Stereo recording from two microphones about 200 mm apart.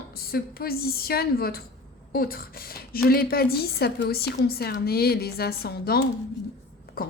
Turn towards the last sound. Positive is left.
turn(degrees=45)  # may be behind; listen again after turning